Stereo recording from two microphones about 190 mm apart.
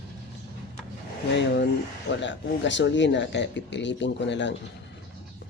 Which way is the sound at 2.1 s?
70° left (ahead or behind).